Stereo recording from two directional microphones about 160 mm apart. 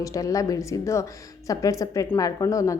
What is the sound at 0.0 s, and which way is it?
A woman's voice, 20° left (ahead or behind).